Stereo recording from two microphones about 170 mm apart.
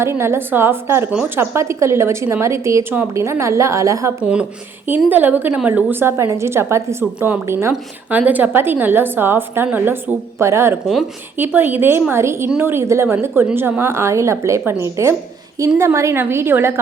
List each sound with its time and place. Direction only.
0.0 s a woman's voice: 15° right (ahead or behind)
4.2 s a woman's voice: 5° right (ahead or behind)